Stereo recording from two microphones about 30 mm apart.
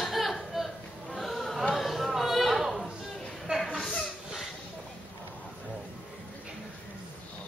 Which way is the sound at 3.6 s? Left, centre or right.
Centre.